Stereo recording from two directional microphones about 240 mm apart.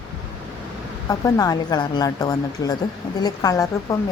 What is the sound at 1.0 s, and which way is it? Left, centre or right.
Speech, centre.